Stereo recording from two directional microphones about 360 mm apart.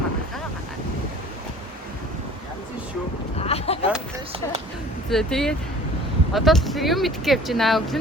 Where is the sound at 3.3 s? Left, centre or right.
Centre.